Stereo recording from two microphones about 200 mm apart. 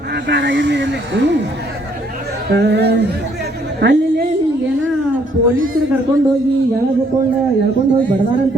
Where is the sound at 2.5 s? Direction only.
60° right (ahead or behind).